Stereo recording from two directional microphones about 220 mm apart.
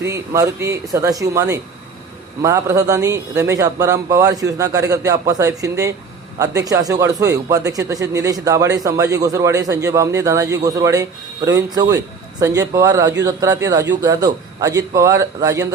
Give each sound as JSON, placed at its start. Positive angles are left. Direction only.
{"t": 0.0, "sound": "speech", "side_deg": -15}